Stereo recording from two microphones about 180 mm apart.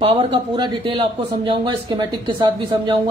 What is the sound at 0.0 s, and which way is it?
Speech, 30° right (ahead or behind).